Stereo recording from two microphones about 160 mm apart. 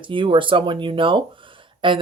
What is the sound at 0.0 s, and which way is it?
Speech, 30° right (ahead or behind).